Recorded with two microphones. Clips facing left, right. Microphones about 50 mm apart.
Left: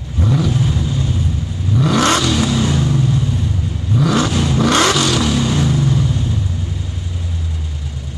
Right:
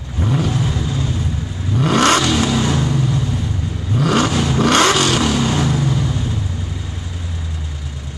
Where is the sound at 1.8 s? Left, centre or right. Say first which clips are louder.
Right 1 dB; right.